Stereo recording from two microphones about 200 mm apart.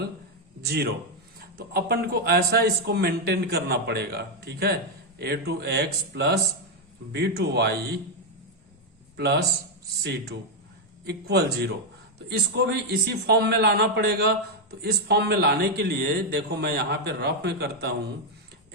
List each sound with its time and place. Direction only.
0.6 s a man's voice: 55° right (ahead or behind)
9.1 s a man's voice: 55° right (ahead or behind)